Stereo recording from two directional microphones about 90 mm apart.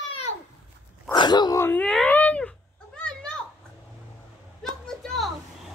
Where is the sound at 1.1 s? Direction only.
55° left (ahead or behind).